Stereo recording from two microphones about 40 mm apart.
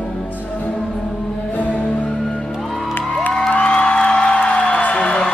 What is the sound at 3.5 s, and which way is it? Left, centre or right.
Music, left.